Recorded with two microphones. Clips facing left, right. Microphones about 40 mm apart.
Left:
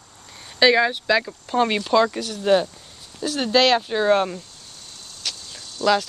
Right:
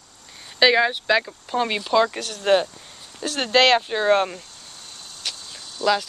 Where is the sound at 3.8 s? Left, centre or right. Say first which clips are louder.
Even; right.